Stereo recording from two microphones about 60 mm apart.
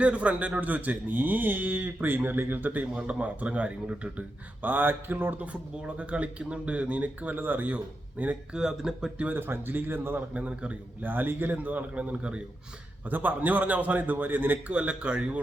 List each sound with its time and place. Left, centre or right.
0.0 s speech: right
5.5 s speech: right
8.5 s speech: centre
9.3 s speech: right
10.3 s speech: right
11.0 s speech: right
13.1 s speech: right